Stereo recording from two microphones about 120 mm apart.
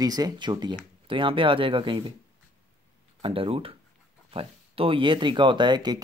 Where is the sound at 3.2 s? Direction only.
50° right (ahead or behind).